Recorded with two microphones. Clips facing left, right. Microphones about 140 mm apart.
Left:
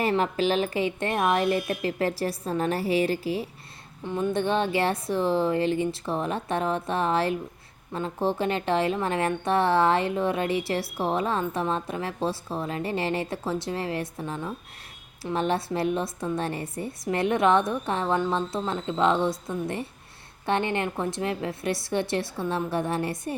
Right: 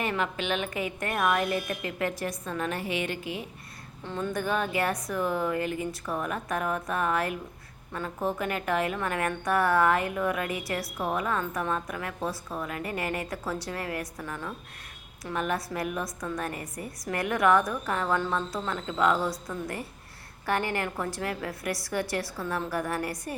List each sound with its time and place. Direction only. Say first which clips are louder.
0.0 s a woman's voice: left 6 dB; 35° left (ahead or behind)
4.0 s a woman's voice: left 5 dB; 20° left (ahead or behind)